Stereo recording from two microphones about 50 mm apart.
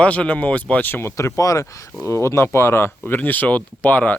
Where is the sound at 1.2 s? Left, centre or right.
Left.